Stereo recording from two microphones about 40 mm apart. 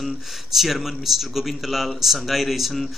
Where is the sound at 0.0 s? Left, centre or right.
Centre.